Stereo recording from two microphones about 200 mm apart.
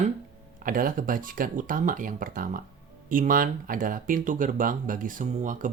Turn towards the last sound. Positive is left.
turn(degrees=-40)  # may be behind; listen again after turning